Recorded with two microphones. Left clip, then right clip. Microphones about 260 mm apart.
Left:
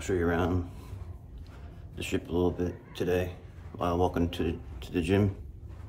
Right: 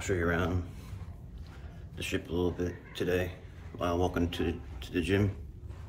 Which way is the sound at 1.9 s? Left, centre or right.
Centre.